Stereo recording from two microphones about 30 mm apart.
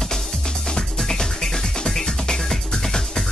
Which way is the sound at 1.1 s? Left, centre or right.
Centre.